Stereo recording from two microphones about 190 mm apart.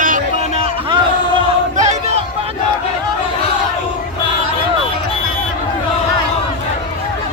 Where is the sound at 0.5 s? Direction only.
30° right (ahead or behind).